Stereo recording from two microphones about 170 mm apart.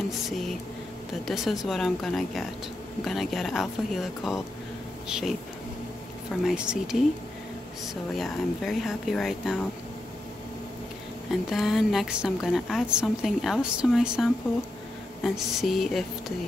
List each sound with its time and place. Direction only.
0.3 s a woman's voice: centre (ahead or behind)
6.4 s a woman's voice: 5° right (ahead or behind)
11.4 s a woman's voice: centre (ahead or behind)